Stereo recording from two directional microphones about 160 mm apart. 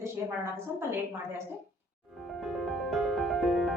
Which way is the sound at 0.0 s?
15° right (ahead or behind).